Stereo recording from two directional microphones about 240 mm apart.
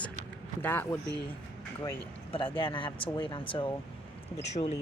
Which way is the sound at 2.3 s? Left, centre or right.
Left.